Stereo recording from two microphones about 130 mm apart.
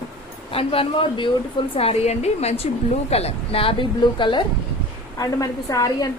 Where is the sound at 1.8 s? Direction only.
55° left (ahead or behind); by 4.4 s 40° left (ahead or behind).